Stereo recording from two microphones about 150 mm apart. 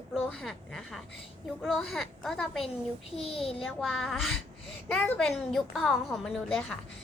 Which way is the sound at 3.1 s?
40° left (ahead or behind).